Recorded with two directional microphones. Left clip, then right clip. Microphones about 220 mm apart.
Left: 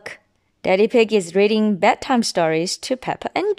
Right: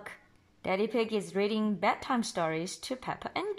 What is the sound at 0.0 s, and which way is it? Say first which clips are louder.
A woman's voice: left 11 dB; 45° left (ahead or behind).